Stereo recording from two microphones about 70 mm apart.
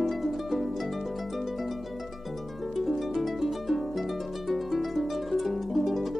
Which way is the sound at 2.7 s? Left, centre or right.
Centre.